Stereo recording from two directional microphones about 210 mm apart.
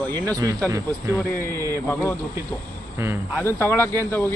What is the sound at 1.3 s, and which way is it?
Speech, 10° left (ahead or behind).